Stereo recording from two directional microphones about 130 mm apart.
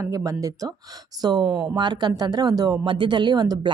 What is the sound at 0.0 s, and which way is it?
Speech, 25° right (ahead or behind).